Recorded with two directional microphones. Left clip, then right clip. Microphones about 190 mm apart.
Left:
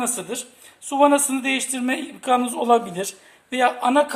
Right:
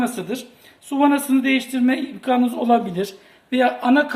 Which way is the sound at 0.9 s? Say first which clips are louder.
Left 2 dB; 60° left (ahead or behind).